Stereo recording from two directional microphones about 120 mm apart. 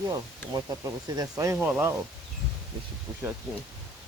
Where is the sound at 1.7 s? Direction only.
15° right (ahead or behind).